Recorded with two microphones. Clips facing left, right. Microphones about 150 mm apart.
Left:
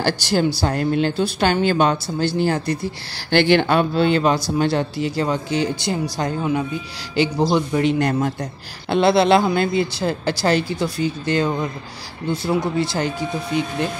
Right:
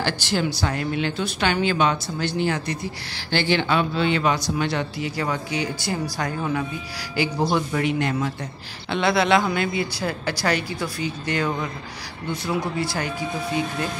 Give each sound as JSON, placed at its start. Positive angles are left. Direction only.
{"t": 0.0, "sound": "speech", "side_deg": 40}
{"t": 3.3, "sound": "speech", "side_deg": 60}
{"t": 8.0, "sound": "speech", "side_deg": 40}